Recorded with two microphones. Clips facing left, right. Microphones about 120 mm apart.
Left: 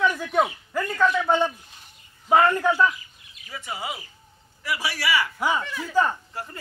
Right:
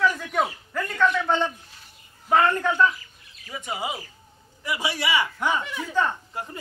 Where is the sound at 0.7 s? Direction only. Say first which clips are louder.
Left 1 dB; 5° left (ahead or behind).